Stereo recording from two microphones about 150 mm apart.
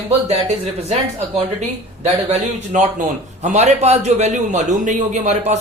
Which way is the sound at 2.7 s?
55° right (ahead or behind).